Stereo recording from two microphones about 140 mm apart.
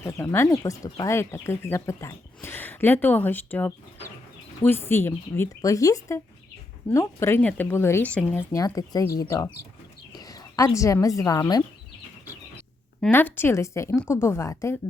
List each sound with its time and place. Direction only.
0.0 s speech: 20° left (ahead or behind)
13.1 s speech: 15° left (ahead or behind)